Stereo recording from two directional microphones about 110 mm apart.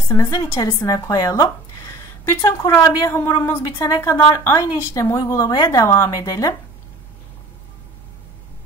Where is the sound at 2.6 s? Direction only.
30° left (ahead or behind).